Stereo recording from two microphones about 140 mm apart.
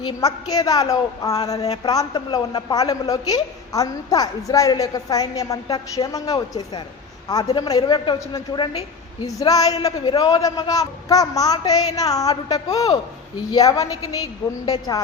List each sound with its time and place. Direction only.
0.2 s a woman's voice: 25° left (ahead or behind)